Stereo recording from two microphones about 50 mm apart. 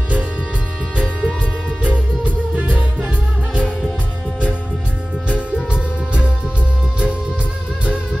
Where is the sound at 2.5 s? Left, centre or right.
Right.